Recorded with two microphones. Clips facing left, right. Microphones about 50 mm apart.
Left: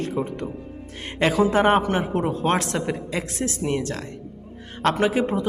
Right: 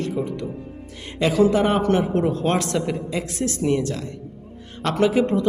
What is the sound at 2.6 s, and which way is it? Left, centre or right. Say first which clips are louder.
Speech: right 2 dB; left.